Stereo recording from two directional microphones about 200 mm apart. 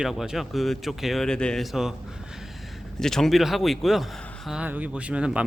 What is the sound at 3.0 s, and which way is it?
A man's voice, centre (ahead or behind).